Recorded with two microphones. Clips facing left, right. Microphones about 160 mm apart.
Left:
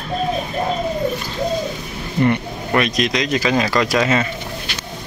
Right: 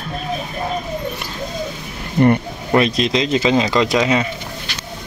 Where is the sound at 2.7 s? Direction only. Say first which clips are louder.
Right 3 dB; 30° right (ahead or behind).